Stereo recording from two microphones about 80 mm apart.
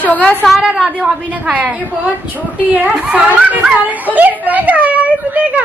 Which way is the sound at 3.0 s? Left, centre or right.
Centre.